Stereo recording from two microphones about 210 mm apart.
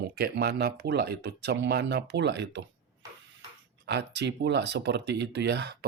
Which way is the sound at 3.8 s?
55° right (ahead or behind).